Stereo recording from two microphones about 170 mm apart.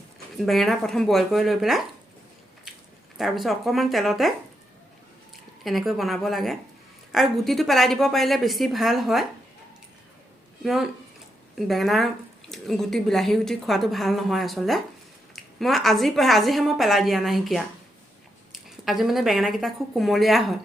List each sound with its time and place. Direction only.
0.3 s speech: centre (ahead or behind)
3.2 s speech: centre (ahead or behind)
5.6 s speech: centre (ahead or behind)
10.6 s speech: centre (ahead or behind)